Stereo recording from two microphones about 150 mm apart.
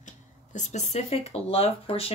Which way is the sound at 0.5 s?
50° left (ahead or behind).